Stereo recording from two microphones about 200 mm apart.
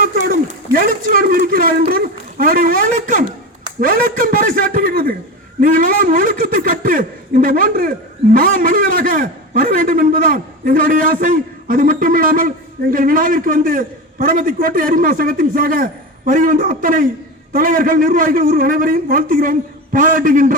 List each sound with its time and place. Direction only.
0.0 s a man's voice: 45° right (ahead or behind)